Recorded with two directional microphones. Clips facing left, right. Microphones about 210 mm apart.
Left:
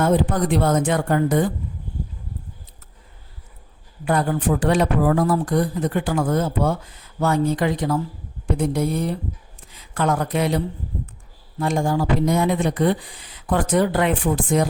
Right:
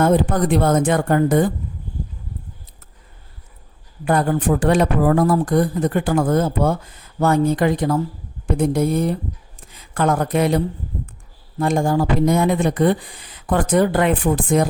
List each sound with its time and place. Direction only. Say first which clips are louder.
0.0 s speech: right 3 dB; 50° right (ahead or behind)
4.0 s speech: right 3 dB; 50° right (ahead or behind)
11.6 s speech: right 3 dB; 50° right (ahead or behind)